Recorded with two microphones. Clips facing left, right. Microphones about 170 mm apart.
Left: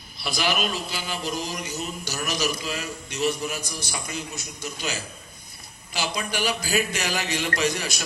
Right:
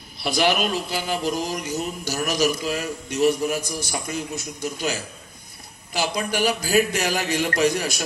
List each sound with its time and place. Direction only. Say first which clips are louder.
0.3 s a man's voice: right 5 dB; 55° right (ahead or behind)